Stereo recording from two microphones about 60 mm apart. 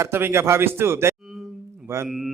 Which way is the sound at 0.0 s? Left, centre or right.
Right.